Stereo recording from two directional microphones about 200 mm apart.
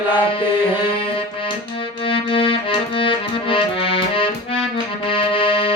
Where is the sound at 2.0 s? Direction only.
25° left (ahead or behind).